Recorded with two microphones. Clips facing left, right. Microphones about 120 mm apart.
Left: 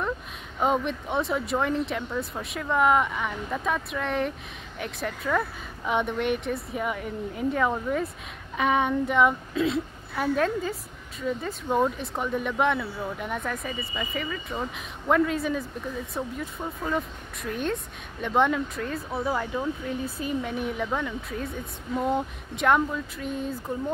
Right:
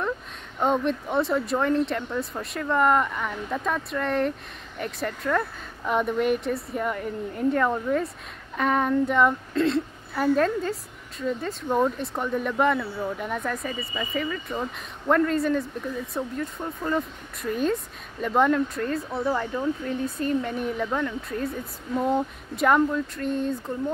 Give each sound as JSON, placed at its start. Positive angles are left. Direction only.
{"t": 0.6, "sound": "a woman's voice", "side_deg": 0}